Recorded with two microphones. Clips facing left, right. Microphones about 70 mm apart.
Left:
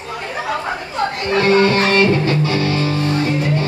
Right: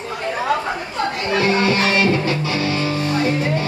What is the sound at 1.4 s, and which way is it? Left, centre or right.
Music, left.